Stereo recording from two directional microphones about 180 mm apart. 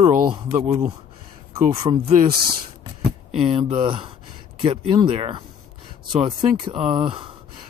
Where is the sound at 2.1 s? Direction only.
55° right (ahead or behind).